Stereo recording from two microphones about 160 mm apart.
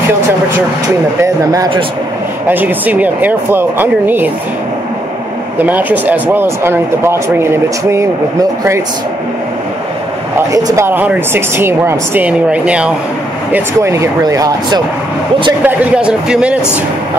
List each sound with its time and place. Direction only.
1.2 s speech: 20° right (ahead or behind)
5.6 s speech: 10° right (ahead or behind)
10.5 s speech: 20° right (ahead or behind)
13.5 s speech: 15° right (ahead or behind)
15.6 s speech: 10° right (ahead or behind)